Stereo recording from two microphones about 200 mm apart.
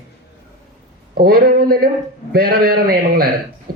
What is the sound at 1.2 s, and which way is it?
Speech, 50° right (ahead or behind).